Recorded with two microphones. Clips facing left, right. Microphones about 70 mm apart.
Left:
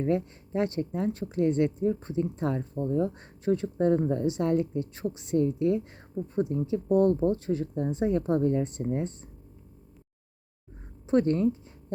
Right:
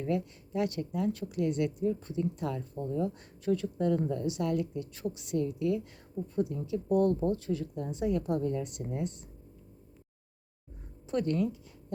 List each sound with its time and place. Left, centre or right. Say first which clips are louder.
0.0 s speech: left 5 dB; left
11.0 s speech: left 6 dB; left